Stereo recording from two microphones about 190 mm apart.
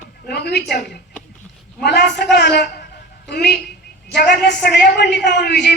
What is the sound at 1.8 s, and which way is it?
A woman's voice, 60° left (ahead or behind).